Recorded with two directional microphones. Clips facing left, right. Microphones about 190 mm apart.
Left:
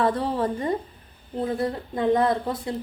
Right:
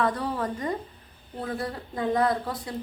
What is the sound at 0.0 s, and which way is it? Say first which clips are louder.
A woman's voice: left 4 dB; 30° left (ahead or behind).